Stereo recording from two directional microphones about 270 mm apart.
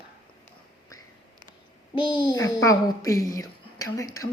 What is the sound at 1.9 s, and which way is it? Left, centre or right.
A child's voice, centre.